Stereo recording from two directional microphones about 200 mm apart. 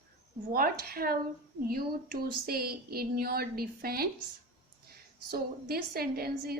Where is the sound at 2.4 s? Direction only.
50° right (ahead or behind).